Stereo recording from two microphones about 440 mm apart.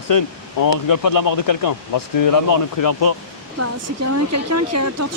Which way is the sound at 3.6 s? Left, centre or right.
Right.